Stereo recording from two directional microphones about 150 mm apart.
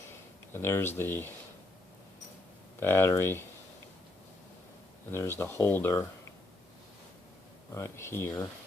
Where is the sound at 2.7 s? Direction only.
15° left (ahead or behind).